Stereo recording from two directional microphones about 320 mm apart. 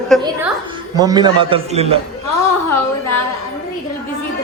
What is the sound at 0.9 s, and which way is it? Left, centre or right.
Speech, centre.